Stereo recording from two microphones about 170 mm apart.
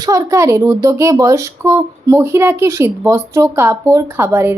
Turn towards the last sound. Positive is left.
turn(degrees=-15)  # may be behind; listen again after turning